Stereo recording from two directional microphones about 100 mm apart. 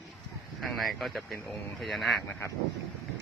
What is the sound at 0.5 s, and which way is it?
Speech, centre (ahead or behind).